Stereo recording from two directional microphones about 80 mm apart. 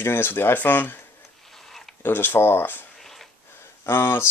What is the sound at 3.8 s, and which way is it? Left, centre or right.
Speech, left.